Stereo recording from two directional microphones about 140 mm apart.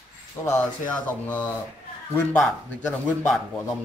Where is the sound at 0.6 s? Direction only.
10° left (ahead or behind).